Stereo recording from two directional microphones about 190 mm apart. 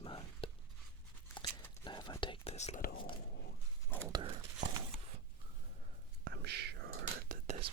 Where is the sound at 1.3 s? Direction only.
20° left (ahead or behind).